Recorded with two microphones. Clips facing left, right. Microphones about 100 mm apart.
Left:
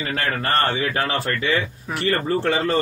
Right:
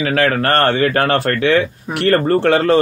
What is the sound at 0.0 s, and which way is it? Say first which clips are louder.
A man's voice: right 9 dB; 65° right (ahead or behind).